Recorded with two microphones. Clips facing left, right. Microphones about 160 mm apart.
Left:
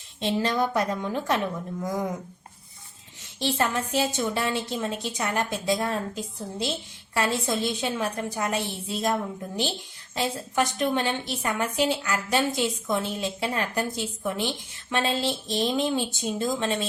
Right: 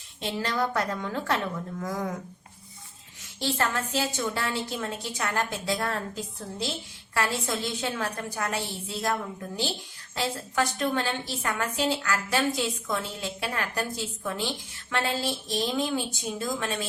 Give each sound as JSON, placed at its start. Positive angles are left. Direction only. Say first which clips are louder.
{"t": 0.2, "sound": "a woman's voice", "louder": "left 4 dB", "side_deg": 20}
{"t": 3.4, "sound": "a woman's voice", "louder": "left 2 dB", "side_deg": 20}